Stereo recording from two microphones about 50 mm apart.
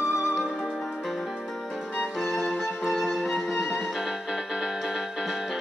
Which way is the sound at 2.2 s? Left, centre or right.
Centre.